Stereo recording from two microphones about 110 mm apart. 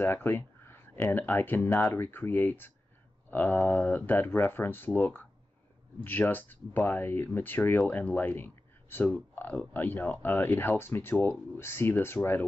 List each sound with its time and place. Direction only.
0.0 s speech: 20° left (ahead or behind)